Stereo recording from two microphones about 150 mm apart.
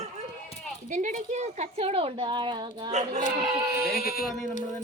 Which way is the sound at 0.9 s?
55° right (ahead or behind).